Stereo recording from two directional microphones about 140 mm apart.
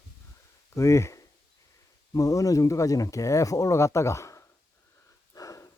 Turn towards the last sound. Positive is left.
turn(degrees=25)  # may be behind; listen again after turning